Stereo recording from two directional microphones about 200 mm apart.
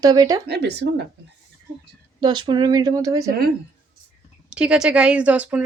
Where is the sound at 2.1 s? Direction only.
20° right (ahead or behind).